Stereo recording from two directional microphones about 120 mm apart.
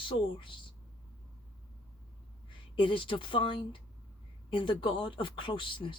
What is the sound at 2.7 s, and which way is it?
Speech, 45° left (ahead or behind).